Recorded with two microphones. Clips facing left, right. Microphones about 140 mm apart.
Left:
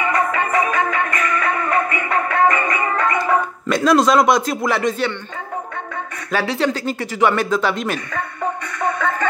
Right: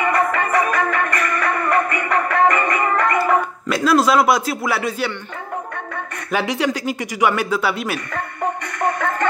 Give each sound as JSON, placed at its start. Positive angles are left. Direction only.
{"t": 0.0, "sound": "music", "side_deg": -55}
{"t": 3.6, "sound": "speech", "side_deg": -5}
{"t": 6.3, "sound": "speech", "side_deg": -15}